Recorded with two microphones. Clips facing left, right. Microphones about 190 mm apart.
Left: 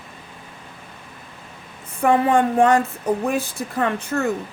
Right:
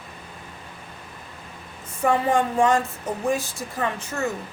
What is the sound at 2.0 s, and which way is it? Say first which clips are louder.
Speech: left 4 dB; 60° left (ahead or behind).